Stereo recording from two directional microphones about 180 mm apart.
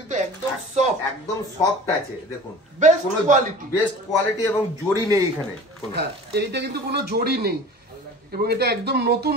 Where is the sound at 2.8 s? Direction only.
45° right (ahead or behind).